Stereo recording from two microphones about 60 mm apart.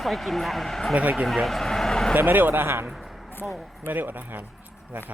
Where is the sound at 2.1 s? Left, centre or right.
Right.